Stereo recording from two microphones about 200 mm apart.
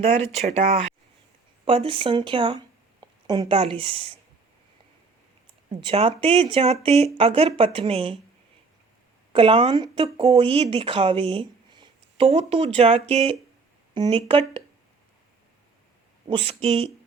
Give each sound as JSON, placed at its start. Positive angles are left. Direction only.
{"t": 0.4, "sound": "speech", "side_deg": -35}
{"t": 5.8, "sound": "speech", "side_deg": -25}
{"t": 9.3, "sound": "speech", "side_deg": -25}
{"t": 16.2, "sound": "speech", "side_deg": -30}